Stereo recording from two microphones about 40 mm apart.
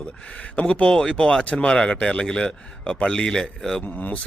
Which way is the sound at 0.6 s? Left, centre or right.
Left.